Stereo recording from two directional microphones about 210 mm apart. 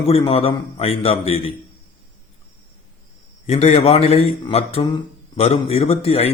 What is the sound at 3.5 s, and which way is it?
A man's voice, 30° left (ahead or behind).